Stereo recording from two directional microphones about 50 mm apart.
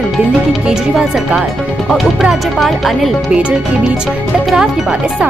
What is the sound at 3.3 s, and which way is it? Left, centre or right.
Music, right.